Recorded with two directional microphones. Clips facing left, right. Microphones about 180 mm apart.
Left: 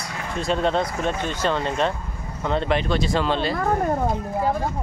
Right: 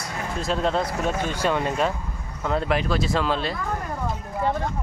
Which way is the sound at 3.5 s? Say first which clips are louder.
Left 8 dB; 55° left (ahead or behind).